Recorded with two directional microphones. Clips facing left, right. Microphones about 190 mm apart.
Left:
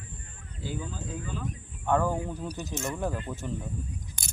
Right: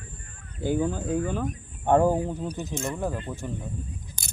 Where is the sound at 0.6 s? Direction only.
55° right (ahead or behind).